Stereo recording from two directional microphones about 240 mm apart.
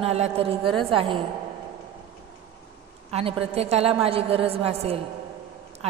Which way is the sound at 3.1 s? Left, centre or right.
Right.